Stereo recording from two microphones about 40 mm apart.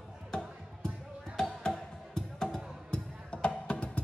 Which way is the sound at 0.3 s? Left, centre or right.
Left.